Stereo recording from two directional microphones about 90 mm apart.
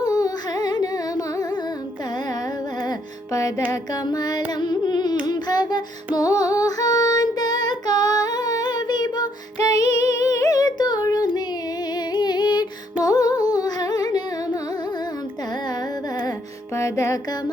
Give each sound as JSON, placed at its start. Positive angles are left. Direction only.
{"t": 0.0, "sound": "humming", "side_deg": 45}
{"t": 4.0, "sound": "music", "side_deg": 45}
{"t": 5.2, "sound": "child singing", "side_deg": 50}
{"t": 6.1, "sound": "female singing", "side_deg": 45}
{"t": 10.2, "sound": "a sound", "side_deg": 35}
{"t": 12.1, "sound": "music", "side_deg": 50}
{"t": 16.7, "sound": "music", "side_deg": 35}